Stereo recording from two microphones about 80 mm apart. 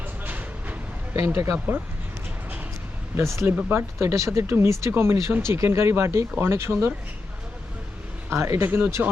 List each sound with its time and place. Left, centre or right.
0.3 s train: right
1.1 s speech: right
3.2 s speech: right
8.3 s speech: right